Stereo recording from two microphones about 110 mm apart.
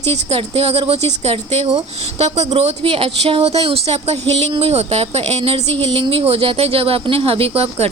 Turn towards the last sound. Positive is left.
turn(degrees=-65)  # may be behind; listen again after turning